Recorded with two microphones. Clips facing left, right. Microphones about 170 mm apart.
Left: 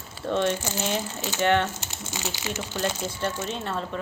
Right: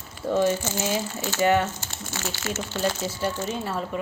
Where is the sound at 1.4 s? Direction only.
5° right (ahead or behind).